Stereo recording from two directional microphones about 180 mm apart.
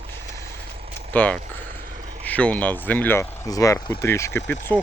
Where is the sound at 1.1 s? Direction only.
5° left (ahead or behind).